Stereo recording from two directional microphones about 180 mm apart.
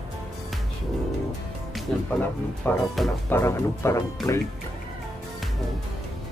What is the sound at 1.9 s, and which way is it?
Speech, 5° left (ahead or behind).